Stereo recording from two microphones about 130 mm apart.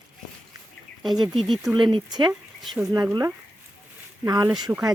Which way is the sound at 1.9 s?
35° right (ahead or behind).